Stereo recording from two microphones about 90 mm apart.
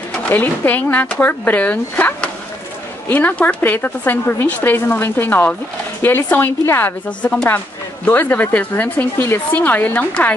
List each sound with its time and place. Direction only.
0.3 s speech: 20° left (ahead or behind)